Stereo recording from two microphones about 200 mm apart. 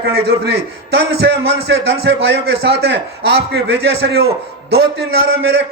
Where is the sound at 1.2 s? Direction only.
55° right (ahead or behind).